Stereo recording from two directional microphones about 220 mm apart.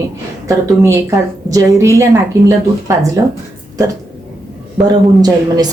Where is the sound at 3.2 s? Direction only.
15° right (ahead or behind).